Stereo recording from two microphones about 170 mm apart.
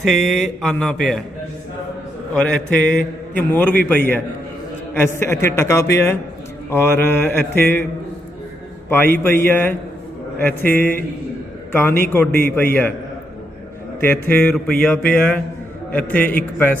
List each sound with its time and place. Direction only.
0.0 s speech: centre (ahead or behind)
2.3 s a man's voice: 5° left (ahead or behind)
8.9 s a man's voice: 10° left (ahead or behind)
9.1 s speech: 55° right (ahead or behind)
9.5 s a man's voice: 10° left (ahead or behind)
14.0 s a man's voice: 10° left (ahead or behind)